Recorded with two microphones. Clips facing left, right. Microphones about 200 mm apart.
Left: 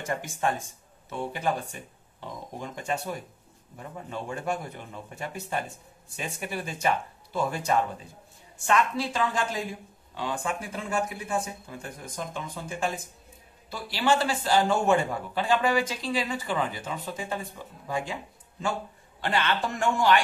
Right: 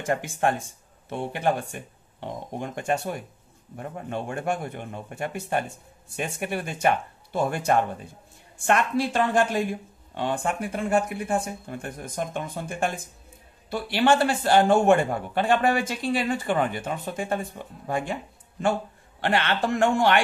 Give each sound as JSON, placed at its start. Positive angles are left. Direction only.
{"t": 0.0, "sound": "speech", "side_deg": -55}